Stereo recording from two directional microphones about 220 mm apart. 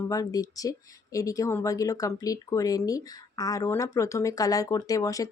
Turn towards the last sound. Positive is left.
turn(degrees=15)  # may be behind; listen again after turning